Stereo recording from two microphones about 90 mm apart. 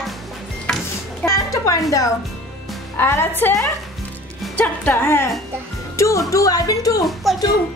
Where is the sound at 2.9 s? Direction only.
25° left (ahead or behind).